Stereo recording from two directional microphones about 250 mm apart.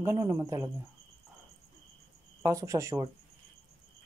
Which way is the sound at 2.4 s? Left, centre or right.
Centre.